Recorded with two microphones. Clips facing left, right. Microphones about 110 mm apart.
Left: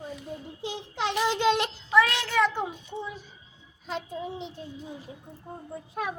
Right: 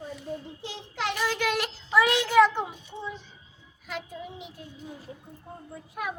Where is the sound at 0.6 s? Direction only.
20° left (ahead or behind).